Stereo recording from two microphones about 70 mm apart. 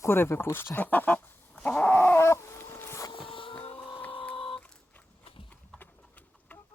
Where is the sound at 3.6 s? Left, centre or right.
Left.